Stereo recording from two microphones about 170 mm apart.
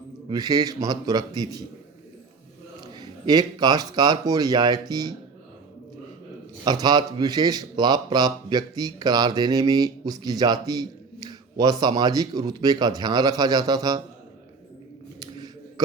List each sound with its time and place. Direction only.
0.3 s speech: 25° right (ahead or behind)
2.8 s speech: 25° right (ahead or behind)
6.7 s speech: 25° right (ahead or behind)